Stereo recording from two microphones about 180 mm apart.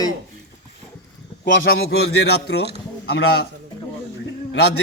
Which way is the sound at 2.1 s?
65° left (ahead or behind).